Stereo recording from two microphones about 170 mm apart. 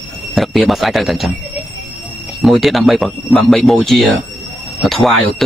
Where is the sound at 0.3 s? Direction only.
Centre (ahead or behind).